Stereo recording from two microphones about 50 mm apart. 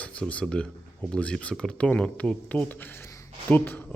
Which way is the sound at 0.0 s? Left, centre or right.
Left.